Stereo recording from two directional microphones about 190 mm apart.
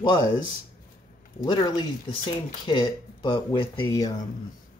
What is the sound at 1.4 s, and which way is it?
Speech, 20° left (ahead or behind).